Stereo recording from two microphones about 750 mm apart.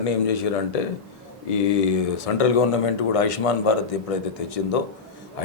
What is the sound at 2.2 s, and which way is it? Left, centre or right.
A man's voice, left.